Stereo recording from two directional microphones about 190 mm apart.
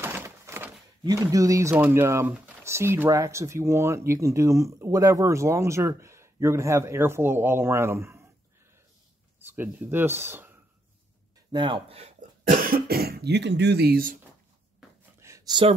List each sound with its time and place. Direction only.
0.0 s speech: 10° right (ahead or behind)
9.4 s speech: 10° right (ahead or behind)
11.5 s speech: 25° right (ahead or behind)
12.2 s speech: 50° right (ahead or behind)
15.1 s a sound: 15° right (ahead or behind)